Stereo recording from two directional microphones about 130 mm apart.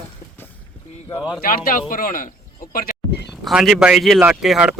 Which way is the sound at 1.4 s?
90° left.